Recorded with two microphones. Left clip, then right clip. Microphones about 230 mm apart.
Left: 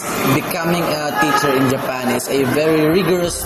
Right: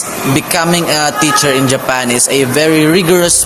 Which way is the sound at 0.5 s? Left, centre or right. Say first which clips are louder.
Right 7 dB; right.